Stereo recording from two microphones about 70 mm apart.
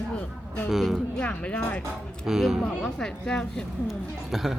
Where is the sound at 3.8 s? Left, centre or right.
Centre.